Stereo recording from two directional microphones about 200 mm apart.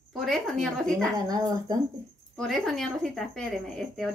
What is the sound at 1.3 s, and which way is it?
Speech, 20° right (ahead or behind).